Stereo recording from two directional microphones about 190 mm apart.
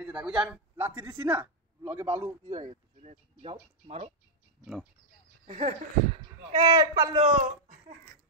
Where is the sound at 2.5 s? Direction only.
35° right (ahead or behind).